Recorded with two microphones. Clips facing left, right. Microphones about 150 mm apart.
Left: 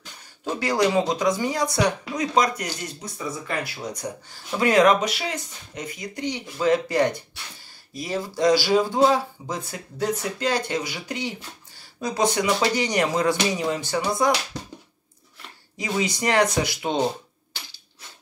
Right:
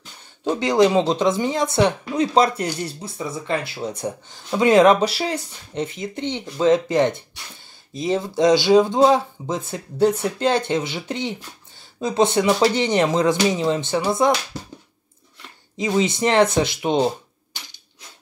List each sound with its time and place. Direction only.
0.5 s speech: 20° right (ahead or behind)
15.8 s speech: 25° right (ahead or behind)